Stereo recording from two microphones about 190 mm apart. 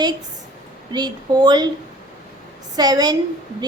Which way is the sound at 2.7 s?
20° right (ahead or behind).